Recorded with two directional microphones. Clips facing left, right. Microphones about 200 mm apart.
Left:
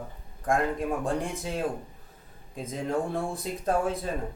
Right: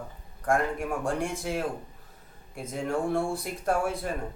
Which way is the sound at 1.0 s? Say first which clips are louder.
Even; 20° left (ahead or behind).